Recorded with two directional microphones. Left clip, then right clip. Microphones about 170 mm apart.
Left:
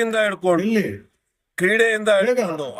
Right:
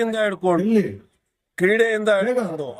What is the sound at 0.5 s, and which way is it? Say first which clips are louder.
Speech: even; 15° left (ahead or behind).